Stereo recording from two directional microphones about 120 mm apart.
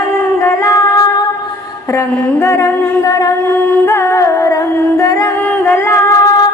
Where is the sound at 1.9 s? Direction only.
20° left (ahead or behind).